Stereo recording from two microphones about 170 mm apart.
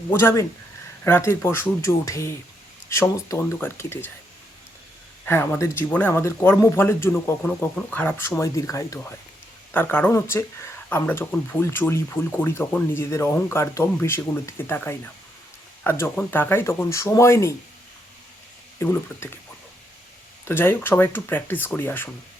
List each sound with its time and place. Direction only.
0.1 s speech: 15° left (ahead or behind)
5.2 s speech: 10° left (ahead or behind)
18.8 s speech: 15° left (ahead or behind)
20.5 s speech: 15° left (ahead or behind)